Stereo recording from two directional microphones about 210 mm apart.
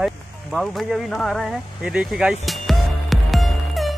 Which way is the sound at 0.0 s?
Centre (ahead or behind).